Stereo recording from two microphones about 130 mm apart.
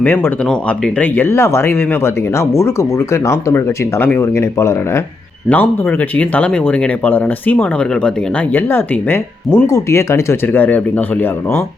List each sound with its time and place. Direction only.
0.9 s speech: 15° left (ahead or behind)
3.1 s speech: 20° left (ahead or behind)
6.1 s speech: 10° left (ahead or behind)